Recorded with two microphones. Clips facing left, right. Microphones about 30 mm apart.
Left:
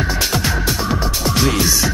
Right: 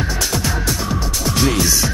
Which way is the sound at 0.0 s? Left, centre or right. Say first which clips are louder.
Left 2 dB; left.